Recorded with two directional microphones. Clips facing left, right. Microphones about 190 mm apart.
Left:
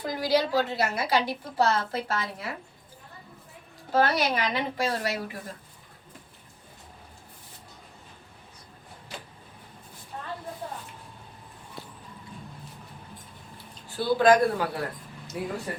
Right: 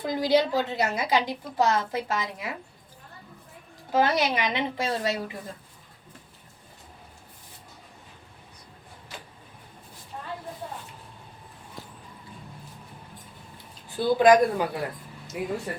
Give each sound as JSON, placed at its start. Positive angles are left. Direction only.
{"t": 0.0, "sound": "a woman's voice", "side_deg": -20}
{"t": 3.9, "sound": "a woman's voice", "side_deg": -20}
{"t": 13.9, "sound": "a woman's voice", "side_deg": -15}